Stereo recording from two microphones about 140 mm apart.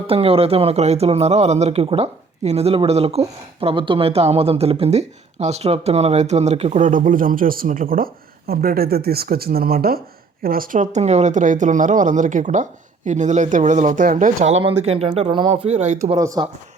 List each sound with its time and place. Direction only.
0.1 s a man's voice: 45° right (ahead or behind); by 14.6 s 60° right (ahead or behind)
14.8 s a man's voice: 45° right (ahead or behind)
15.7 s a man's voice: 55° right (ahead or behind)
16.1 s speech: 25° right (ahead or behind)